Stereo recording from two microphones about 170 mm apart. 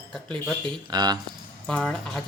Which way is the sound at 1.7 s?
5° left (ahead or behind).